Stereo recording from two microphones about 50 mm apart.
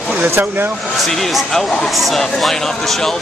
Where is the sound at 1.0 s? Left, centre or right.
Centre.